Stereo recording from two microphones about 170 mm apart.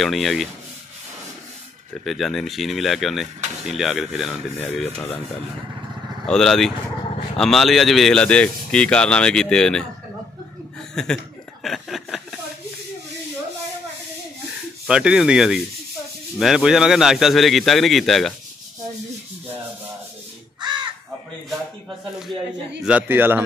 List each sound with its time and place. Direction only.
0.0 s speech: centre (ahead or behind)
2.0 s speech: centre (ahead or behind)
6.2 s speech: 5° left (ahead or behind)
11.0 s speech: centre (ahead or behind)
11.6 s chuckle: centre (ahead or behind)
14.9 s speech: 5° right (ahead or behind)
20.6 s crow: 25° right (ahead or behind)
22.8 s a man's voice: 10° right (ahead or behind)